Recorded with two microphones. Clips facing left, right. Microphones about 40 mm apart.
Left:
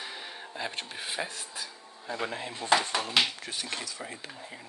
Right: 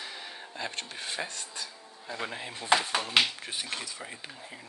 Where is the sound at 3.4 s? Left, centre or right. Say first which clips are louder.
Even; centre.